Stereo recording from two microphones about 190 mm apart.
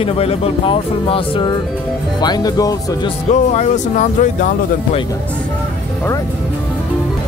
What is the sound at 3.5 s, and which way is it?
Speech, 40° left (ahead or behind).